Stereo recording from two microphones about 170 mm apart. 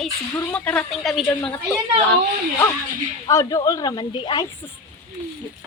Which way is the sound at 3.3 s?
20° left (ahead or behind).